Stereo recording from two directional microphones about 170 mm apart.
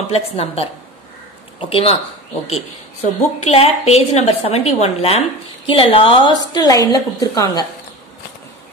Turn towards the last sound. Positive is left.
turn(degrees=20)  # may be behind; listen again after turning